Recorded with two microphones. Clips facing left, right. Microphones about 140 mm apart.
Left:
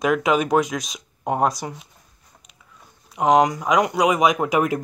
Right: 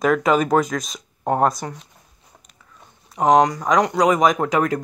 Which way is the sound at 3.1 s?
5° left (ahead or behind).